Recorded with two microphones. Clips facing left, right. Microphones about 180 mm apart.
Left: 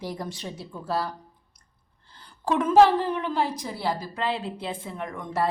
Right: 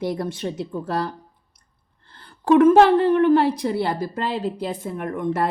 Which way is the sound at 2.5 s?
60° right (ahead or behind).